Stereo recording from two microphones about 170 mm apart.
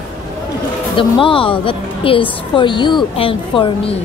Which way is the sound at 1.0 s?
30° left (ahead or behind).